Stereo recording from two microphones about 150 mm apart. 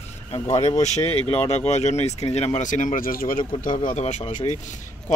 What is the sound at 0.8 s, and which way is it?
Speech, 50° left (ahead or behind).